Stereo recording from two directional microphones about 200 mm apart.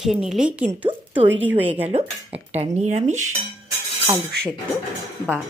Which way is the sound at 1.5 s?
30° right (ahead or behind).